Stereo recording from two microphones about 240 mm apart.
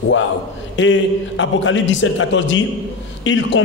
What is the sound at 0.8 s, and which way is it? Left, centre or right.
A man's voice, left.